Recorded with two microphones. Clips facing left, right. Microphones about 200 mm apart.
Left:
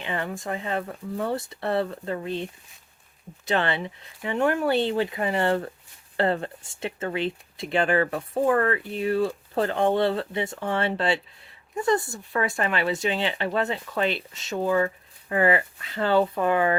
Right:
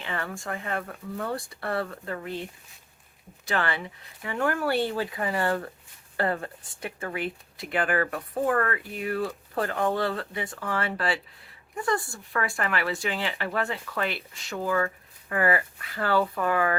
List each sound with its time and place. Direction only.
0.0 s speech: 20° left (ahead or behind)